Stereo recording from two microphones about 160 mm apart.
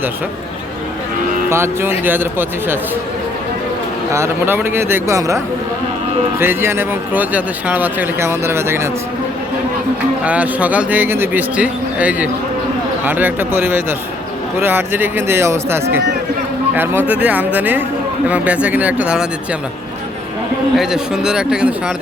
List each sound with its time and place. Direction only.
1.5 s speech: 15° right (ahead or behind)
4.1 s speech: 15° right (ahead or behind)
6.4 s speech: 15° right (ahead or behind)
10.2 s speech: 10° right (ahead or behind)
20.7 s speech: 5° right (ahead or behind)